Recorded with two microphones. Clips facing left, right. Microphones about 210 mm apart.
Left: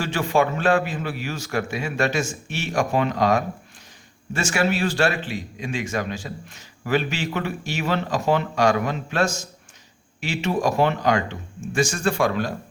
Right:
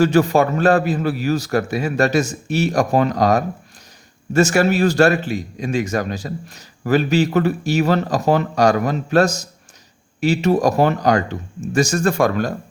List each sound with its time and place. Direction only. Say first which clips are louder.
0.0 s speech: right 7 dB; 40° right (ahead or behind)